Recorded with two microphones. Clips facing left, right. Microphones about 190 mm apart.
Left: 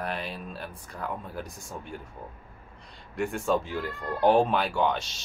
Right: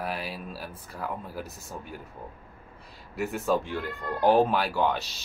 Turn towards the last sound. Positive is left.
turn(degrees=0)  # may be behind; listen again after turning